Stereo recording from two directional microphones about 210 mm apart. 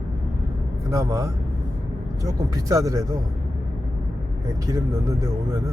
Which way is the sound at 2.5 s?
15° right (ahead or behind).